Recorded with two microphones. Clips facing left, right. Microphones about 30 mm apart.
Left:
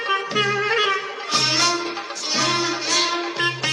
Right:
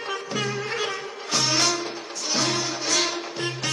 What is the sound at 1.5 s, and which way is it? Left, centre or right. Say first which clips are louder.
Music: left 2 dB; centre.